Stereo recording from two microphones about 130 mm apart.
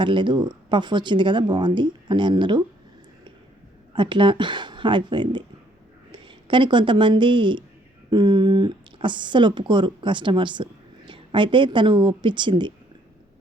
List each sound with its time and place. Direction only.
0.0 s speech: 40° right (ahead or behind)
3.9 s speech: 40° right (ahead or behind)